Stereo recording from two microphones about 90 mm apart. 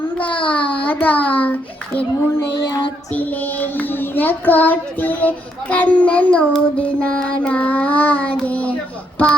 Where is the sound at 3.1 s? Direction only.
20° left (ahead or behind).